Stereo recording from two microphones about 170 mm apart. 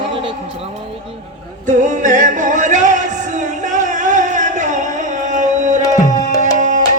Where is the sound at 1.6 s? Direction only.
45° right (ahead or behind).